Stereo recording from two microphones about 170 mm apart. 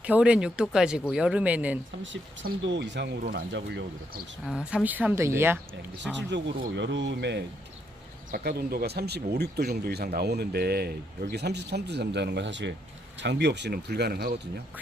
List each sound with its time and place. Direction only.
0.0 s speech: 5° right (ahead or behind)
2.0 s speech: 90° right
4.4 s speech: 5° right (ahead or behind)
6.1 s speech: 90° right
8.3 s speech: 65° right (ahead or behind)